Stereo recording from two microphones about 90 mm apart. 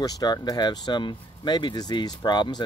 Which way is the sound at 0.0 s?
45° left (ahead or behind).